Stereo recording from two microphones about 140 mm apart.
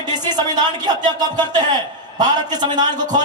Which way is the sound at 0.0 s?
30° right (ahead or behind).